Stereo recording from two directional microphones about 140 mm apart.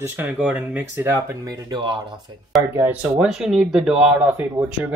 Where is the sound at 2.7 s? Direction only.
10° right (ahead or behind).